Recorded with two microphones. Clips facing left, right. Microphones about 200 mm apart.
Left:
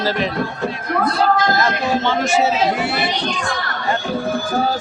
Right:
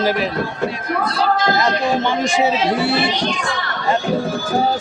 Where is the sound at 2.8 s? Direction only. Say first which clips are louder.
Right 3 dB; 30° right (ahead or behind).